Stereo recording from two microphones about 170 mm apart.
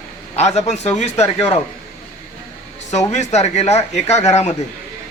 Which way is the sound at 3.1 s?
40° left (ahead or behind).